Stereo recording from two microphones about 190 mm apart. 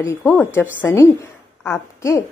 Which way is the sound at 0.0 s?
15° left (ahead or behind).